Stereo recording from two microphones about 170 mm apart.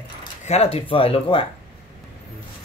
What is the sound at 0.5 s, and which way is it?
Speech, 35° left (ahead or behind).